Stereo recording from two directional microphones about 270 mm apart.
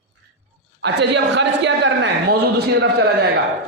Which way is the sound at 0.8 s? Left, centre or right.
Right.